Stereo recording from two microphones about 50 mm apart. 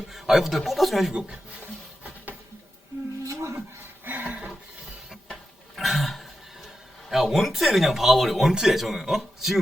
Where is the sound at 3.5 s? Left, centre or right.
Right.